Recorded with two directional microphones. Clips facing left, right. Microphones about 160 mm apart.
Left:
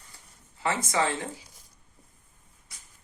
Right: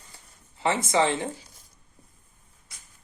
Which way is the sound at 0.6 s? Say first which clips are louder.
Right 4 dB; 25° right (ahead or behind).